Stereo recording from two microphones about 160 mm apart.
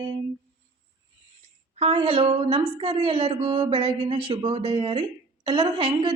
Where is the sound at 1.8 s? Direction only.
35° right (ahead or behind).